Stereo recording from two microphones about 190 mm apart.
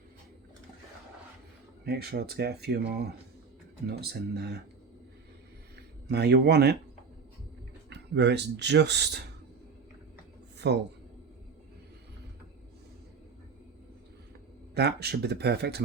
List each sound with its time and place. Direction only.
1.8 s speech: 55° right (ahead or behind)
6.1 s speech: 60° right (ahead or behind)
7.9 s speech: 65° right (ahead or behind)
10.6 s speech: 65° right (ahead or behind)
14.8 s speech: 60° right (ahead or behind)